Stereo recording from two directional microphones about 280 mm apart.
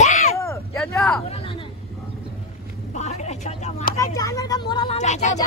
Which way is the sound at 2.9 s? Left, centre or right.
Left.